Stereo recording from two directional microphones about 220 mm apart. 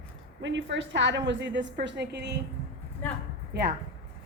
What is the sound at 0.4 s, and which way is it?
A woman's voice, 55° right (ahead or behind).